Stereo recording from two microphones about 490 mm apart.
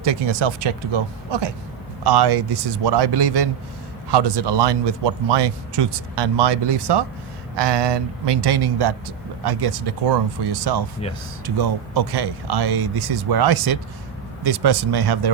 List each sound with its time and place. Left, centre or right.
0.0 s speech: right